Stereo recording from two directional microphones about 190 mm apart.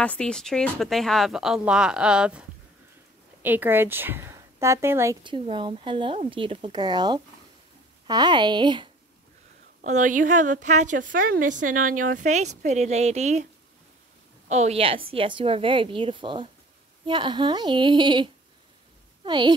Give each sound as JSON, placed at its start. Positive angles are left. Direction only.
{"t": 0.0, "sound": "speech", "side_deg": 5}
{"t": 3.4, "sound": "a woman's voice", "side_deg": -10}
{"t": 5.2, "sound": "speech", "side_deg": -25}
{"t": 9.8, "sound": "a woman's voice", "side_deg": -40}
{"t": 14.5, "sound": "speech", "side_deg": -35}